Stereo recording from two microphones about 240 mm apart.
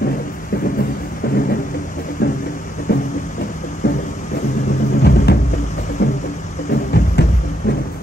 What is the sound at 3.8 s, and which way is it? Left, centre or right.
Music, left.